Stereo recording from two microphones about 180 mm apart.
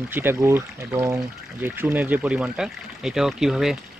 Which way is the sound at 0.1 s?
10° right (ahead or behind).